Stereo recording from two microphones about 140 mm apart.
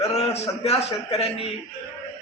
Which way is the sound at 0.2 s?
45° left (ahead or behind).